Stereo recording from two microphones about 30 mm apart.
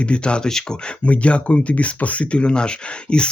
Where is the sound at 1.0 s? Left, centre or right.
Left.